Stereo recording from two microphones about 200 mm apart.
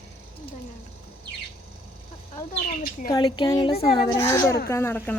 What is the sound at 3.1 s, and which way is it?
Speech, 20° left (ahead or behind).